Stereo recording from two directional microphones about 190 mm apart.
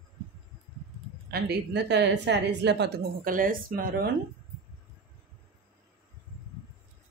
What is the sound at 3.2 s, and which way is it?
Speech, 45° right (ahead or behind).